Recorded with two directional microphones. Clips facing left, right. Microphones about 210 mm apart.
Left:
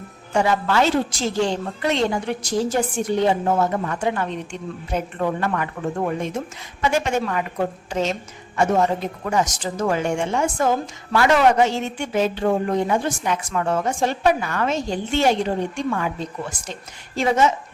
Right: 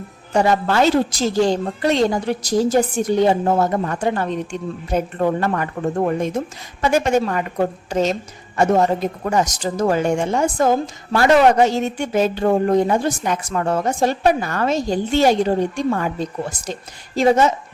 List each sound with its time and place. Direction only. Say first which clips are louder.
0.3 s speech: right 3 dB; 40° right (ahead or behind)
6.8 s speech: right 4 dB; 40° right (ahead or behind)